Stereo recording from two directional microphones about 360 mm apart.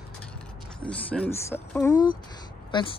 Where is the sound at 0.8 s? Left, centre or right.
Centre.